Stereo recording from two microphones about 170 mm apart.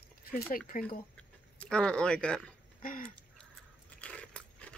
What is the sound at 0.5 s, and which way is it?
Speech, 55° left (ahead or behind).